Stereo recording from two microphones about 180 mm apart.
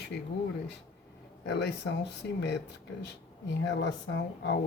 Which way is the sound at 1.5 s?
70° left (ahead or behind).